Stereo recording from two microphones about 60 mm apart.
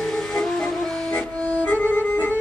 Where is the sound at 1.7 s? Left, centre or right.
Left.